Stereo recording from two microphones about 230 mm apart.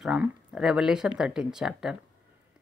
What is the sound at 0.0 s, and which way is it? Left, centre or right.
A woman's voice, centre.